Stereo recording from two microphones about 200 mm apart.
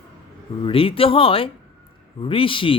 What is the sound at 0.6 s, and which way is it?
Speech, 25° left (ahead or behind).